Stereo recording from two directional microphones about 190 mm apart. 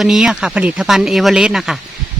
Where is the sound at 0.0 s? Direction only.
Centre (ahead or behind).